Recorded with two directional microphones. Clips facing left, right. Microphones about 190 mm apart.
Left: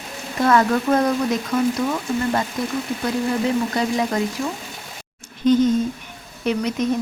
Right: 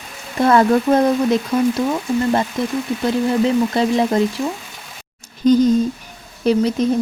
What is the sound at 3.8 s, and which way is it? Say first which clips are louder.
Speech: right 5 dB; 30° right (ahead or behind).